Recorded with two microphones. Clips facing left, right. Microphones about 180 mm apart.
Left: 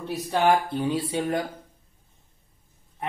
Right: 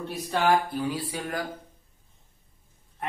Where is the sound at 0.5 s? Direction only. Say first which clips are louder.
Left 1 dB; 25° left (ahead or behind).